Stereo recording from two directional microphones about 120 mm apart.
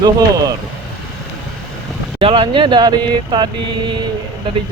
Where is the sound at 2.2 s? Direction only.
45° right (ahead or behind).